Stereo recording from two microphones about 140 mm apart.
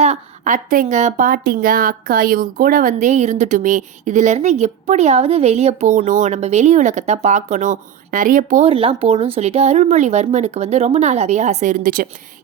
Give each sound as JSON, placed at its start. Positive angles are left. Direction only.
{"t": 0.0, "sound": "a woman's voice", "side_deg": -55}
{"t": 6.0, "sound": "a woman's voice", "side_deg": -65}
{"t": 8.6, "sound": "speech", "side_deg": -40}